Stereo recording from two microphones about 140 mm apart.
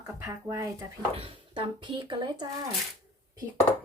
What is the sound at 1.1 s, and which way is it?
Speech, 40° right (ahead or behind).